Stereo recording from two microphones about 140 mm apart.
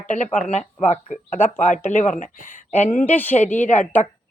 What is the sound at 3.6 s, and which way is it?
Speech, 60° left (ahead or behind).